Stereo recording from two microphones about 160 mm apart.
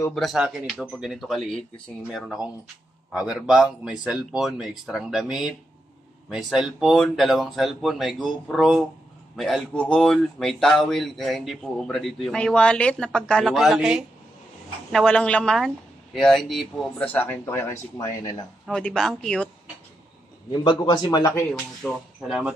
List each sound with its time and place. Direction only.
0.1 s speech: centre (ahead or behind); by 18.0 s 15° left (ahead or behind)
18.7 s speech: 5° left (ahead or behind)
20.6 s a man's voice: 30° left (ahead or behind)
21.3 s speech: 15° left (ahead or behind)
21.8 s speech: centre (ahead or behind)